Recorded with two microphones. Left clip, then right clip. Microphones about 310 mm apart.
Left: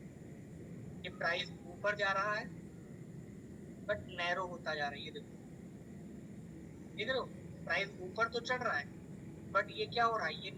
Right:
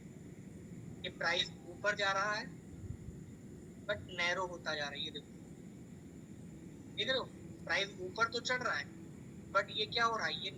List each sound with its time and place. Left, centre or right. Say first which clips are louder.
1.0 s a man's voice: right 2 dB; right
3.8 s a man's voice: right 1 dB; right
6.9 s a man's voice: right 1 dB; right